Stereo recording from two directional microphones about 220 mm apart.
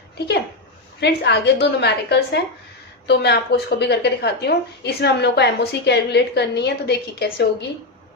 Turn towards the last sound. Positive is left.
turn(degrees=50)  # may be behind; listen again after turning